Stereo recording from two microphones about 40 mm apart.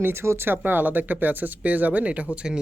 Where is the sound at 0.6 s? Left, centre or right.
Right.